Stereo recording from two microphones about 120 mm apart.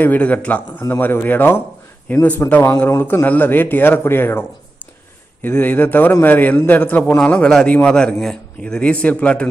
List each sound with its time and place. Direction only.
0.0 s a man's voice: 15° left (ahead or behind)